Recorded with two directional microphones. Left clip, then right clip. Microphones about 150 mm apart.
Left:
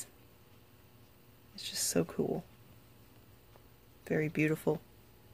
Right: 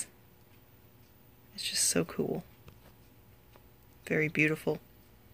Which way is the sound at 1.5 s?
10° left (ahead or behind).